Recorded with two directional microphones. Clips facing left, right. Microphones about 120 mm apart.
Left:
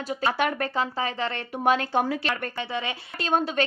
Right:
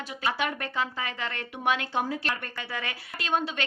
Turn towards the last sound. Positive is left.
turn(degrees=40)  # may be behind; listen again after turning